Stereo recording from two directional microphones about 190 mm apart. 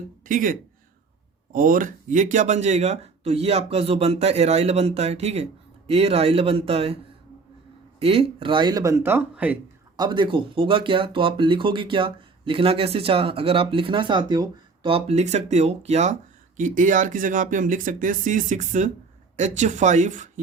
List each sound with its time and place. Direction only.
0.3 s speech: 45° right (ahead or behind)
1.5 s speech: 45° right (ahead or behind); by 9.6 s 10° right (ahead or behind)
10.0 s speech: 25° right (ahead or behind); by 20.4 s 40° right (ahead or behind)